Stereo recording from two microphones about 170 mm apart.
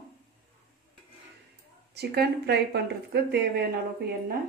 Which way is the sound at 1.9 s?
70° right (ahead or behind).